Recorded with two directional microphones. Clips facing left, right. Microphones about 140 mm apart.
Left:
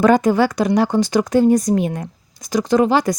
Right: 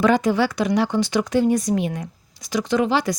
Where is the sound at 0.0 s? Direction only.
45° left (ahead or behind).